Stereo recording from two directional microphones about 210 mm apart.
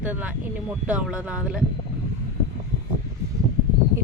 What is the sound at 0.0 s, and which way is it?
Speech, 5° right (ahead or behind).